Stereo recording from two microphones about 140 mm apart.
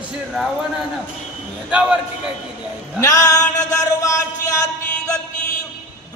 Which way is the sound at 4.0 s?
20° left (ahead or behind).